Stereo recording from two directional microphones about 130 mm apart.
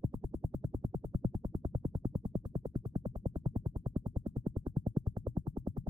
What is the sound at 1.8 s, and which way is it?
Music, 35° right (ahead or behind).